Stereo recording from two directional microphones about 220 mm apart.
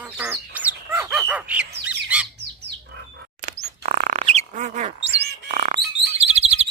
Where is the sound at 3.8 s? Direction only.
35° right (ahead or behind).